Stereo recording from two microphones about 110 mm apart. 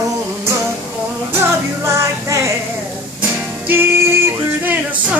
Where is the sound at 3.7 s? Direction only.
20° right (ahead or behind).